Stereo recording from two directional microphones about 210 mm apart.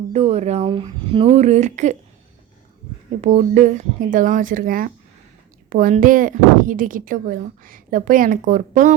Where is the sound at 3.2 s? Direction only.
35° right (ahead or behind).